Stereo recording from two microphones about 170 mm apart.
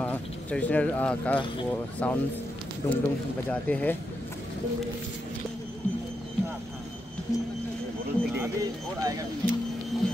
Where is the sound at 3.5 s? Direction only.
10° left (ahead or behind).